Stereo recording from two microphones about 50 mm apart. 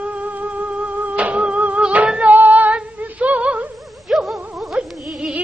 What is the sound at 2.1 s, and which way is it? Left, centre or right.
Female singing, right.